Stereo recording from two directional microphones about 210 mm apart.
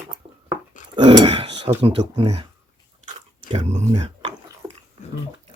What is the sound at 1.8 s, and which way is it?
Speech, 30° right (ahead or behind).